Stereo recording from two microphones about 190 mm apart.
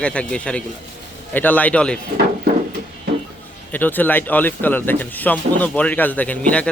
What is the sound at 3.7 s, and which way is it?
Speech, 10° left (ahead or behind).